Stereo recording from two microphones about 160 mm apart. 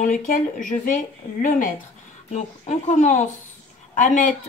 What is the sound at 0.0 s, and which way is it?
Speech, 55° left (ahead or behind).